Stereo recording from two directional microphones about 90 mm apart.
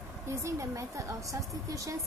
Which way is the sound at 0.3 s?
35° right (ahead or behind).